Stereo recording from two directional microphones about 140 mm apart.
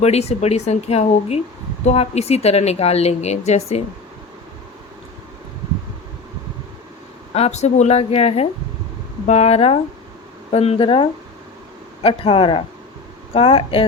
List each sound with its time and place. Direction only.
0.0 s speech: 50° left (ahead or behind)
7.3 s speech: 50° left (ahead or behind)
12.0 s speech: 40° left (ahead or behind)